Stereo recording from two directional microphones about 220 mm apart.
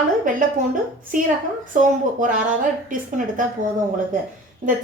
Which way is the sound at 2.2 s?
35° right (ahead or behind).